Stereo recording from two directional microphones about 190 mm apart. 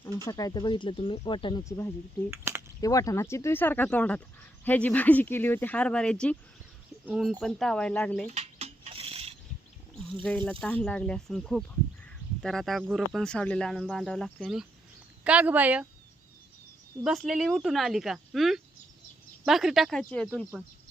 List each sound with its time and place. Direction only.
0.3 s speech: 20° left (ahead or behind)
2.3 s speech: 15° right (ahead or behind)
2.8 s speech: 20° left (ahead or behind)
8.3 s cutlery: 35° right (ahead or behind)
10.4 s speech: 5° left (ahead or behind)
17.0 s speech: centre (ahead or behind)